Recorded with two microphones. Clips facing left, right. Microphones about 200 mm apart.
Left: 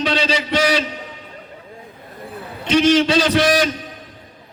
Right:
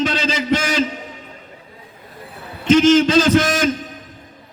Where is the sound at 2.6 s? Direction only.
45° right (ahead or behind).